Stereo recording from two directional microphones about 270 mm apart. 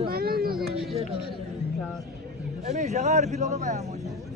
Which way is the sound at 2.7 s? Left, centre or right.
Right.